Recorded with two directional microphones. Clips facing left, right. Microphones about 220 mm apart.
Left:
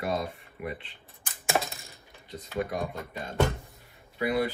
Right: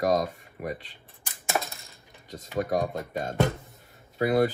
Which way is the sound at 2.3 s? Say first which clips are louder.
Right 4 dB; 45° right (ahead or behind).